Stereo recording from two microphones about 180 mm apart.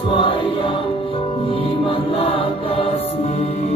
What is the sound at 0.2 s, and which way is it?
Music, 30° left (ahead or behind).